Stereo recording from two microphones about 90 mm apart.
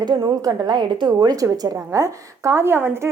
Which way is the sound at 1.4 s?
35° right (ahead or behind).